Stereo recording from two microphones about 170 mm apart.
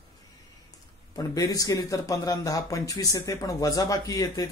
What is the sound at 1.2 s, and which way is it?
A man's voice, 20° left (ahead or behind).